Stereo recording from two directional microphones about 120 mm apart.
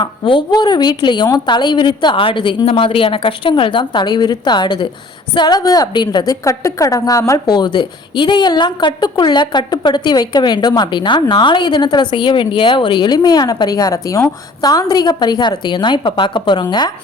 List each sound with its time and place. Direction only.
0.0 s a woman's voice: 40° left (ahead or behind)